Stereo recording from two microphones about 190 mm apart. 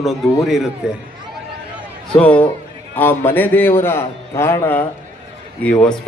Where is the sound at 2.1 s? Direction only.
5° left (ahead or behind).